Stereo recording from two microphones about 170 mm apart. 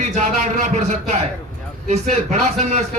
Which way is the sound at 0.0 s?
45° right (ahead or behind).